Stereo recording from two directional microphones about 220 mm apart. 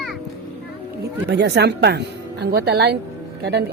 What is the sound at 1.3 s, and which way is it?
Speech, 50° right (ahead or behind).